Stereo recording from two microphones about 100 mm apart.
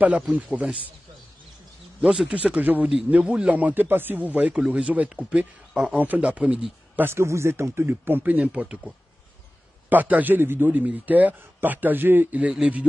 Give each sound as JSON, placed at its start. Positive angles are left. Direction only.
{"t": 0.0, "sound": "a man's voice", "side_deg": -15}
{"t": 2.0, "sound": "a man's voice", "side_deg": -10}
{"t": 7.1, "sound": "a man's voice", "side_deg": -25}